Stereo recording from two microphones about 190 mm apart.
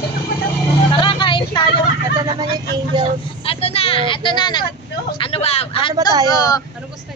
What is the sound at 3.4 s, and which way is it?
Speech, 30° left (ahead or behind).